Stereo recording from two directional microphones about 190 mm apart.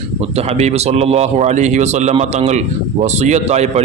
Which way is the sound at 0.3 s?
35° right (ahead or behind).